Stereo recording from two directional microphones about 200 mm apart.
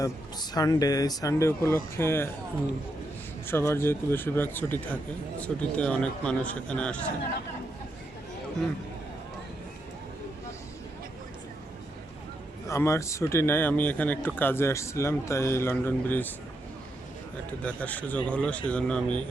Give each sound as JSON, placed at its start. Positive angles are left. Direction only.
{"t": 0.0, "sound": "a man's voice", "side_deg": 20}
{"t": 3.4, "sound": "a man's voice", "side_deg": 15}
{"t": 12.6, "sound": "a man's voice", "side_deg": 15}
{"t": 17.6, "sound": "a man's voice", "side_deg": 5}